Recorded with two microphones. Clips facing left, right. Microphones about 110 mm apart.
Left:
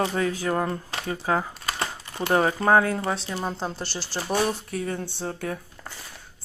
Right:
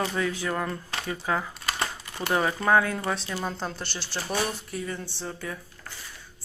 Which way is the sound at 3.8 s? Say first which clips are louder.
Left 3 dB; 35° left (ahead or behind).